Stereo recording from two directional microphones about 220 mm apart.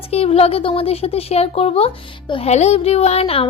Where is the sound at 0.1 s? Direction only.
25° left (ahead or behind).